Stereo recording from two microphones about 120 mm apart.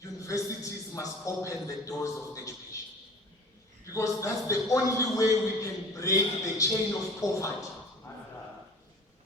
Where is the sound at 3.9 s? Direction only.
25° left (ahead or behind).